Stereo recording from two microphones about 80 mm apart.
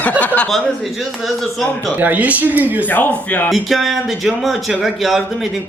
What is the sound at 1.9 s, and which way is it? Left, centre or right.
Speech, right.